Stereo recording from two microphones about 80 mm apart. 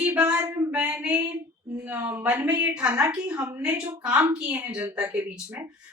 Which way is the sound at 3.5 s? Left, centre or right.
Right.